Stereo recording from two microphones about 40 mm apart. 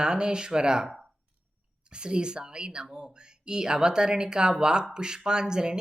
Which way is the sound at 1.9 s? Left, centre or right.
Right.